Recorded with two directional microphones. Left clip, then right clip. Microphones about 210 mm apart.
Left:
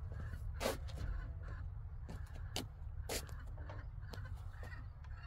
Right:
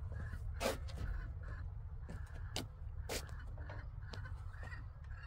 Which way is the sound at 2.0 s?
30° left (ahead or behind).